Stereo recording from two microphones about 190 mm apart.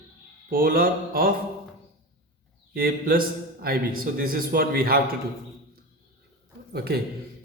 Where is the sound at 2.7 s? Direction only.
50° right (ahead or behind).